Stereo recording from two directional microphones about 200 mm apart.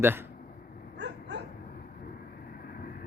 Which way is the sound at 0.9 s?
60° right (ahead or behind).